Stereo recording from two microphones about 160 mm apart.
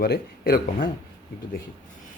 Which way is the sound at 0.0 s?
75° left (ahead or behind).